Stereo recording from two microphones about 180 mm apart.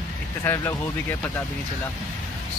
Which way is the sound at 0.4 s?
15° left (ahead or behind).